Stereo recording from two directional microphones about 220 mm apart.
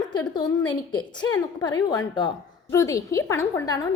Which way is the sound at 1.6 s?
20° left (ahead or behind).